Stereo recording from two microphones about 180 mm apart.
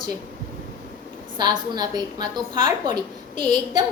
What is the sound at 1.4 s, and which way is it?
A woman's voice, 25° right (ahead or behind).